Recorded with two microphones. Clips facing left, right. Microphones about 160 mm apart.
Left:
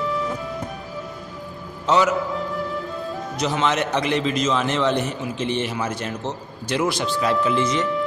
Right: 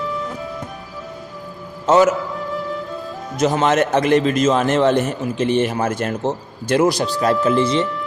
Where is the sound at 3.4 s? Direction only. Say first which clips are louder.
Right 6 dB; 45° right (ahead or behind).